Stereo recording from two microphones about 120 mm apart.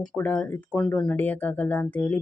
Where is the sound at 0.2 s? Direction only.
15° left (ahead or behind).